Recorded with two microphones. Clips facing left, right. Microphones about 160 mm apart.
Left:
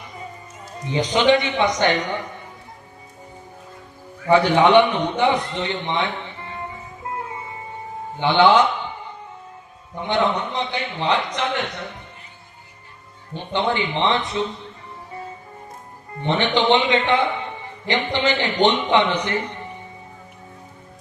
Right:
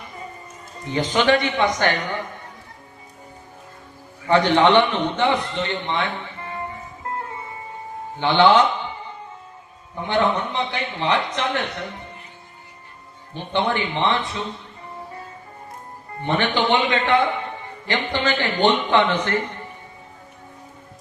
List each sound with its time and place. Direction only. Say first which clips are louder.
0.9 s a man's voice: left 2 dB; 15° left (ahead or behind)
4.3 s a man's voice: left 1 dB; 10° left (ahead or behind)
8.2 s a man's voice: even; 15° left (ahead or behind)
10.1 s a man's voice: even; 15° left (ahead or behind)
13.3 s a man's voice: even; 20° left (ahead or behind)
16.2 s a man's voice: left 2 dB; 20° left (ahead or behind)